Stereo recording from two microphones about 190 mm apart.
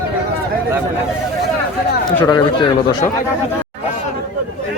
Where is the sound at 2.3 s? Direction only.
25° left (ahead or behind).